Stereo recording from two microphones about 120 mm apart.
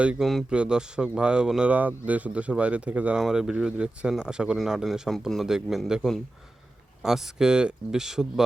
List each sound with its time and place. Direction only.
0.0 s a man's voice: 5° right (ahead or behind)